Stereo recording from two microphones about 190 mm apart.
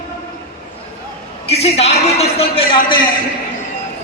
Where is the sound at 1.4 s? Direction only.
35° left (ahead or behind).